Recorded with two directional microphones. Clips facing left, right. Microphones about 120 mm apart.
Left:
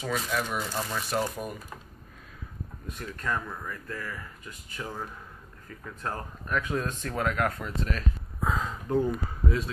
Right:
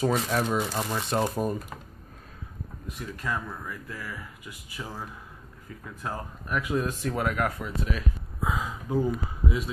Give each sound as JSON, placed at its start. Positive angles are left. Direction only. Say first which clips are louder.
{"t": 0.0, "sound": "speech", "louder": "right 5 dB", "side_deg": -40}
{"t": 0.5, "sound": "speech", "louder": "right 4 dB", "side_deg": -25}
{"t": 3.0, "sound": "speech", "louder": "even", "side_deg": -10}
{"t": 6.0, "sound": "speech", "louder": "even", "side_deg": -10}